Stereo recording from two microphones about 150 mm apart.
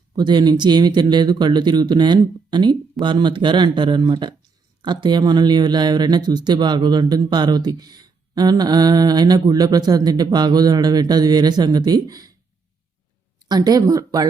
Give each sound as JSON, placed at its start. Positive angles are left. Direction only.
{"t": 0.2, "sound": "speech", "side_deg": -30}
{"t": 13.5, "sound": "speech", "side_deg": -25}